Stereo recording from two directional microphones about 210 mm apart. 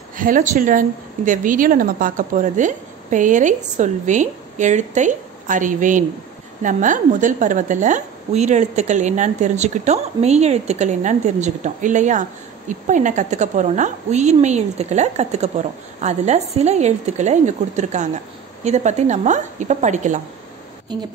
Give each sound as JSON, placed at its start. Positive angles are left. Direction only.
{"t": 0.1, "sound": "a woman's voice", "side_deg": -40}